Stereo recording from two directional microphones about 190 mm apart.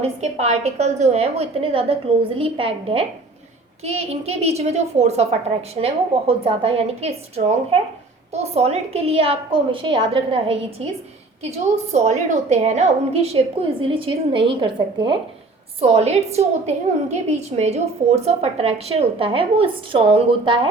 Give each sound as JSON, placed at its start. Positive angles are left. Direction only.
{"t": 0.0, "sound": "a woman's voice", "side_deg": -35}
{"t": 11.9, "sound": "a woman's voice", "side_deg": -35}